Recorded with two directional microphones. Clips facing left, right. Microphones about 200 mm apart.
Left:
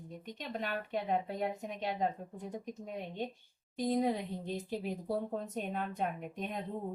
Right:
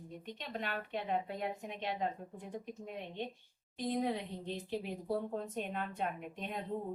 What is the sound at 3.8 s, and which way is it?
Speech, 40° left (ahead or behind).